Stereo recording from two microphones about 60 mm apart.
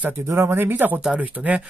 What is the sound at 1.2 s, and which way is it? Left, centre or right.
Speech, right.